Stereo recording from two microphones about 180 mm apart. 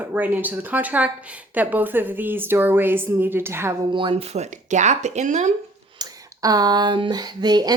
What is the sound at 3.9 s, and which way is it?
Speech, 25° right (ahead or behind).